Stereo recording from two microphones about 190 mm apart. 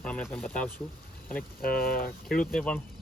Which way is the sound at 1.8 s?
50° left (ahead or behind).